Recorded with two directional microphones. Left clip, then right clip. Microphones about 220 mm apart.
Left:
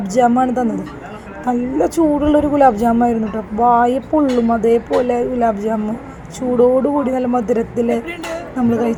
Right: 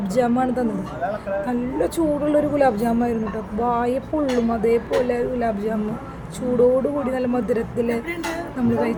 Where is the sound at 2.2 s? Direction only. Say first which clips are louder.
Left 6 dB; 15° left (ahead or behind).